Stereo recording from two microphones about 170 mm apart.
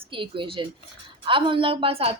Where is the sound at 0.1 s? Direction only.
30° right (ahead or behind).